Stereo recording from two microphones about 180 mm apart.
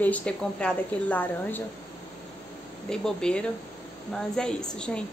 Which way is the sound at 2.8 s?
5° left (ahead or behind).